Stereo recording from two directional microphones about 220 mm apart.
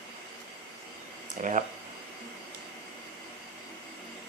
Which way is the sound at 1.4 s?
35° right (ahead or behind).